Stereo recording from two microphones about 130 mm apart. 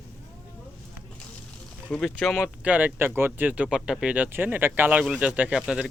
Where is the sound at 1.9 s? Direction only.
5° left (ahead or behind).